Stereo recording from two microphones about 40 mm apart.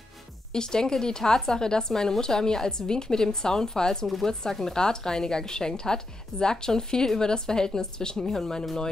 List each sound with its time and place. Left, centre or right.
0.5 s speech: centre